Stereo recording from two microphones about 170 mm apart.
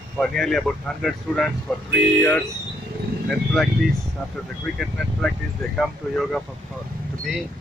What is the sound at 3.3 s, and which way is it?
Speech, centre (ahead or behind).